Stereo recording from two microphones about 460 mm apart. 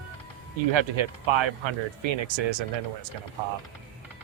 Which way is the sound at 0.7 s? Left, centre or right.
Right.